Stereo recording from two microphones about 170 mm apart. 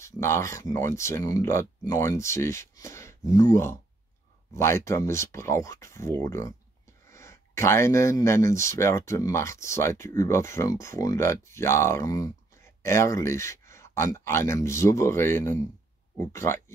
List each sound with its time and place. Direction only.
0.0 s speech: 15° left (ahead or behind)